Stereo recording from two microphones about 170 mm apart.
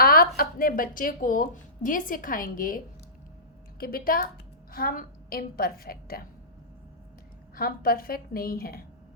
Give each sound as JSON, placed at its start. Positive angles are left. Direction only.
{"t": 0.0, "sound": "a sound", "side_deg": 60}
{"t": 0.6, "sound": "a woman's voice", "side_deg": 55}
{"t": 7.5, "sound": "a woman's voice", "side_deg": 60}